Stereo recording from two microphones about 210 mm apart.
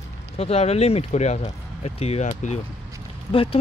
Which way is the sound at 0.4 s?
30° left (ahead or behind).